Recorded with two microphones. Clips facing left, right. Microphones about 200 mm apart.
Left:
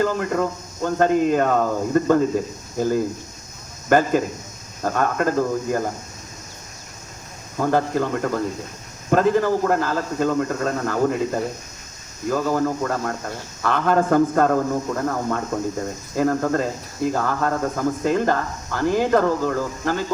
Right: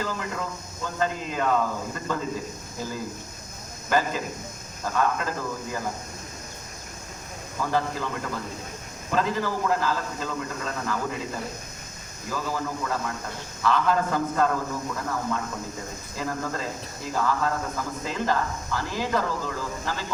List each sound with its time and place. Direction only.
0.0 s speech: 55° left (ahead or behind)
7.6 s speech: 55° left (ahead or behind)